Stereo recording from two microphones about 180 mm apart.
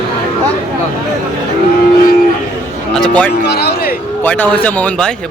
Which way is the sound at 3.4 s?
65° left (ahead or behind).